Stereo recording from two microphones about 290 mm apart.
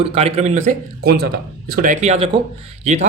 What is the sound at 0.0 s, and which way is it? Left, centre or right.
A man's voice, right.